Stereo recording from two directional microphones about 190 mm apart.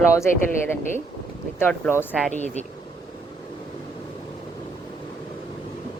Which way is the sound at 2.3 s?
35° left (ahead or behind).